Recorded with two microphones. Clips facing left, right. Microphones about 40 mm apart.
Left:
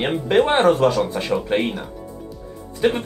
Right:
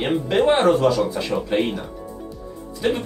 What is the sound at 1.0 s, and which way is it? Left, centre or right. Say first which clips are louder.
Speech: left 1 dB; left.